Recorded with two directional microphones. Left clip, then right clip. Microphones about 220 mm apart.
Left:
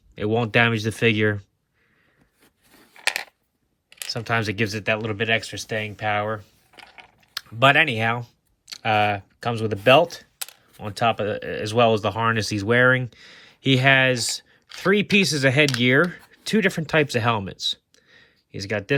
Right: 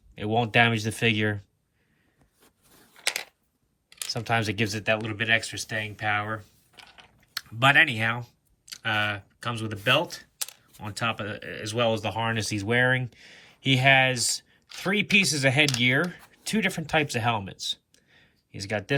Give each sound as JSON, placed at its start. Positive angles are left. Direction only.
{"t": 0.2, "sound": "speech", "side_deg": 10}
{"t": 4.1, "sound": "speech", "side_deg": 10}